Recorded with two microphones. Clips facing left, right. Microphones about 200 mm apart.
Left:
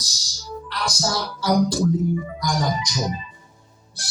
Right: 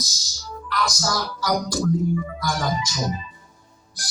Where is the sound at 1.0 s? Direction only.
25° left (ahead or behind).